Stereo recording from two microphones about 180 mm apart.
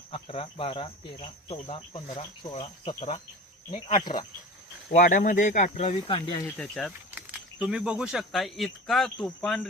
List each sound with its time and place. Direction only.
0.1 s speech: 30° left (ahead or behind)
4.9 s speech: 45° left (ahead or behind); by 6.4 s 30° left (ahead or behind)
6.4 s speech: 5° left (ahead or behind)
7.2 s speech: 5° right (ahead or behind)